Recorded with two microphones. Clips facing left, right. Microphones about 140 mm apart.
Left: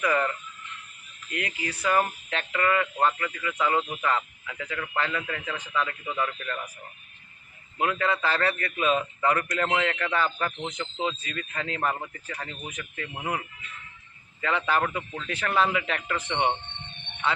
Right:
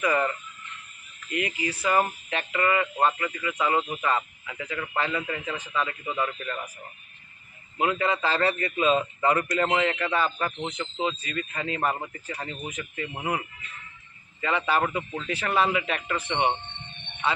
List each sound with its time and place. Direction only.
0.0 s speech: 10° right (ahead or behind)
1.5 s speech: 5° right (ahead or behind)
7.8 s a man's voice: 20° right (ahead or behind)
14.4 s speech: 10° right (ahead or behind)